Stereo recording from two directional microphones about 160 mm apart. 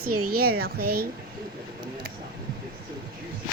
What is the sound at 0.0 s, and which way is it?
A woman's voice, 70° right (ahead or behind).